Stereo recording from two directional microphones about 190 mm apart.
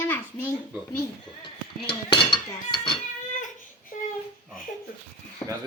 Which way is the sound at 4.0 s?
40° left (ahead or behind).